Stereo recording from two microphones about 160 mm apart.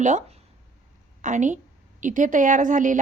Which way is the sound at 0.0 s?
50° right (ahead or behind).